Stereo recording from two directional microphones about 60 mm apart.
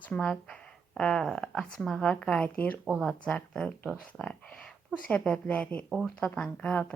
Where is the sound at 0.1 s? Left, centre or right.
Centre.